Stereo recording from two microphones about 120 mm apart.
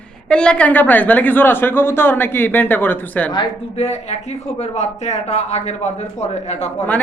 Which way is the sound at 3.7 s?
65° left (ahead or behind).